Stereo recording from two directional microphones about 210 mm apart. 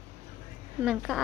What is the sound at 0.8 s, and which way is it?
Speech, centre (ahead or behind).